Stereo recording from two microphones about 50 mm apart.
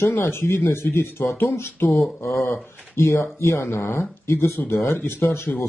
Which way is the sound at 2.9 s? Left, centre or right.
Left.